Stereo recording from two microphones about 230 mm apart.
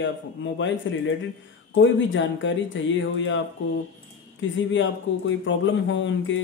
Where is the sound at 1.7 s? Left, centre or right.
Left.